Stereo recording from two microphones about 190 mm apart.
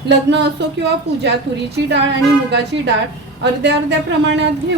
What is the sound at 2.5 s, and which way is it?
Speech, 65° right (ahead or behind).